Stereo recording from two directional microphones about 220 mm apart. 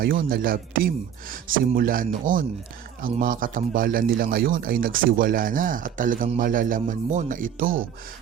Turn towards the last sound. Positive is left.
turn(degrees=-35)  # may be behind; listen again after turning